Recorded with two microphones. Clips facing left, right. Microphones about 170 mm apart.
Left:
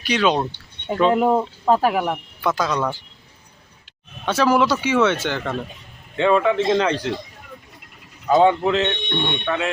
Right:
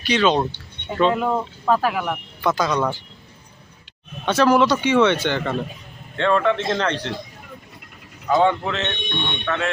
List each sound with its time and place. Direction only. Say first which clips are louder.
0.0 s speech: right 1 dB; 5° left (ahead or behind)
1.1 s speech: left 4 dB; 25° left (ahead or behind)
1.9 s speech: left 3 dB; 35° left (ahead or behind)
2.4 s speech: right 1 dB; 5° left (ahead or behind)
4.3 s speech: right 1 dB; 5° left (ahead or behind)
8.4 s speech: left 4 dB; 15° left (ahead or behind)